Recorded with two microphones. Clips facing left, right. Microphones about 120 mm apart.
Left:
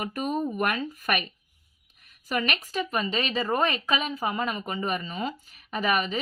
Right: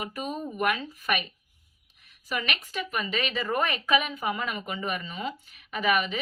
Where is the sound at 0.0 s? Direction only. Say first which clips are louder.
Left 5 dB; 55° left (ahead or behind).